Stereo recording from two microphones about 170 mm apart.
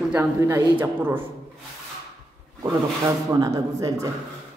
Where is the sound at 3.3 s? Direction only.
20° right (ahead or behind).